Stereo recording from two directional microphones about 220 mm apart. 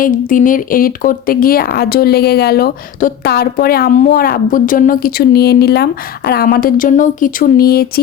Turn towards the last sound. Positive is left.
turn(degrees=45)  # may be behind; listen again after turning